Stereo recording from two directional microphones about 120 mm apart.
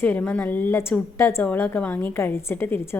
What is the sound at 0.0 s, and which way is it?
A woman's voice, 15° left (ahead or behind).